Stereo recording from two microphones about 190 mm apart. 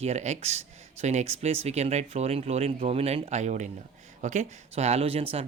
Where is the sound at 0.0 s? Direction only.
35° right (ahead or behind).